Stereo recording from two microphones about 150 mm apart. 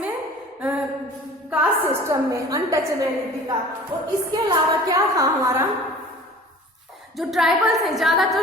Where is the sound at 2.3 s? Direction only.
20° right (ahead or behind).